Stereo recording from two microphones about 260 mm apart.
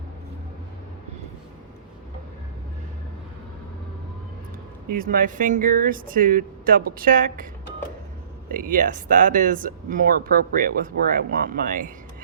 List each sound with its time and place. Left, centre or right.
4.9 s speech: right
8.4 s speech: right